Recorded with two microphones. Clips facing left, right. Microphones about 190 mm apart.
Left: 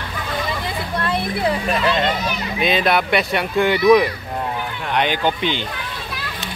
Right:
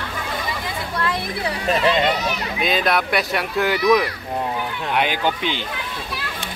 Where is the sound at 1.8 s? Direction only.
20° right (ahead or behind).